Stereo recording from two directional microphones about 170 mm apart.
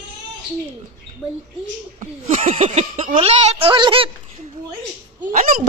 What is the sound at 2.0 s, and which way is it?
Speech, 40° right (ahead or behind).